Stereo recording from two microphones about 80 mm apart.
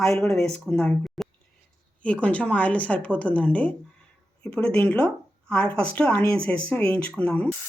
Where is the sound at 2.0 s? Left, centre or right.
Centre.